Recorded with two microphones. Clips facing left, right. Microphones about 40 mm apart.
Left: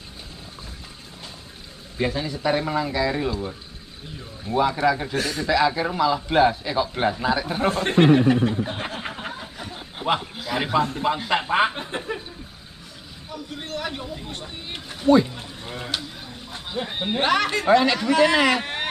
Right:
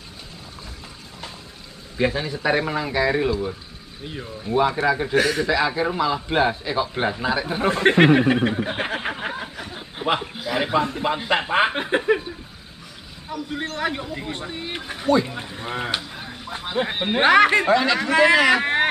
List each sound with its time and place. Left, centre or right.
2.0 s speech: centre
3.3 s speech: centre
7.7 s speech: right
8.8 s a sound: right
9.6 s snicker: centre
10.3 s chuckle: centre
10.8 s speech: centre
11.7 s speech: right
13.7 s speech: right
16.2 s a sound: right
16.7 s speech: right
17.6 s speech: centre
17.9 s speech: right